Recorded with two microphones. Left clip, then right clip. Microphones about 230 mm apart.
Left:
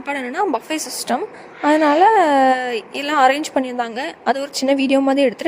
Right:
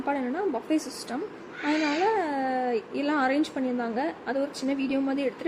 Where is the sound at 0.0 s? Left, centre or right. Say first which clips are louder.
Left 7 dB; left.